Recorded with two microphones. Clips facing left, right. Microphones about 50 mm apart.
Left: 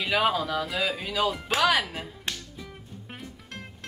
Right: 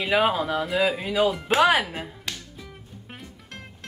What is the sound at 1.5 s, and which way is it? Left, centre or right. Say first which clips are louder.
Speech: right 4 dB; right.